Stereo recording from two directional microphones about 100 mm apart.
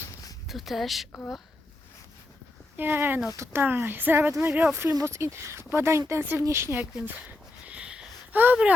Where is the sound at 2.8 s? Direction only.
20° right (ahead or behind).